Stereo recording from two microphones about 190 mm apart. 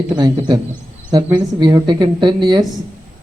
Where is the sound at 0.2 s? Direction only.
20° right (ahead or behind).